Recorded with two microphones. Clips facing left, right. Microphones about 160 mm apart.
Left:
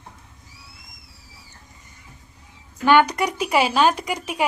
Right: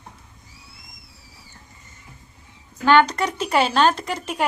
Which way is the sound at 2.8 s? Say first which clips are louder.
Even; 10° left (ahead or behind).